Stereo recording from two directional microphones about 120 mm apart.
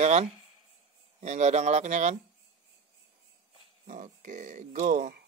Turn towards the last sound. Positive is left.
turn(degrees=-75)  # may be behind; listen again after turning